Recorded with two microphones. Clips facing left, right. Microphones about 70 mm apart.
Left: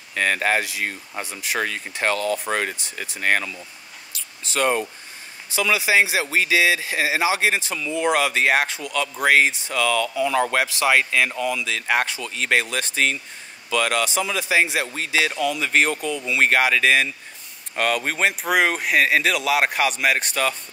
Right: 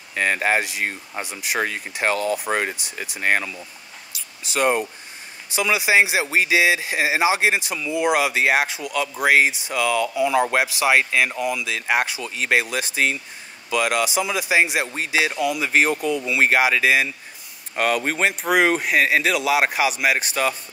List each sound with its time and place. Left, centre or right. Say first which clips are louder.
0.1 s speech: right 1 dB; centre
4.1 s a sound: right 1 dB; centre
5.5 s speech: right 1 dB; centre